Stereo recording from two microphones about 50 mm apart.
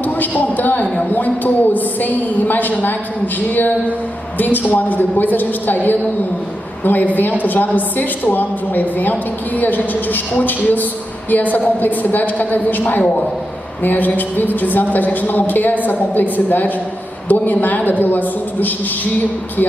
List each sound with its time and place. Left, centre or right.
0.0 s a man's voice: left
6.8 s a woman's voice: left